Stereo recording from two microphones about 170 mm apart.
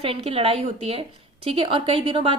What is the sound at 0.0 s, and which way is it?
A woman's voice, 35° right (ahead or behind).